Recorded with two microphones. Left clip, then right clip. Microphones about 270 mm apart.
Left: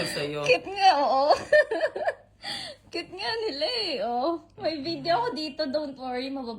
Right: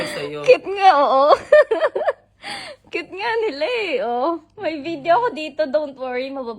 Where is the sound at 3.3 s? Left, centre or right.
Right.